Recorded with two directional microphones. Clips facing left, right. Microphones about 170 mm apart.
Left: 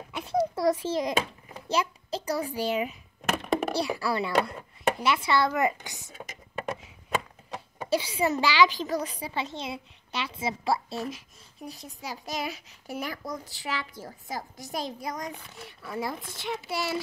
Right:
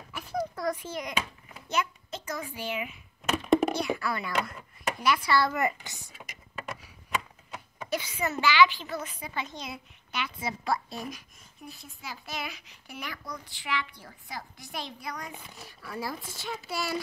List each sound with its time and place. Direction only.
0.1 s a sound: 25° left (ahead or behind)
0.6 s a child's voice: 30° left (ahead or behind)
6.2 s vehicle: 35° left (ahead or behind)
7.5 s a sound: 30° left (ahead or behind)
8.2 s a child's voice: 35° left (ahead or behind)
11.6 s a child's voice: 40° left (ahead or behind)
15.9 s a child's voice: 20° left (ahead or behind)
16.2 s a child's voice: centre (ahead or behind)
16.4 s a child's voice: 20° left (ahead or behind)